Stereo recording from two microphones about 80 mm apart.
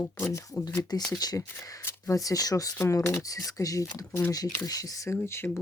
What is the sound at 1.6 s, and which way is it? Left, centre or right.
Speech, left.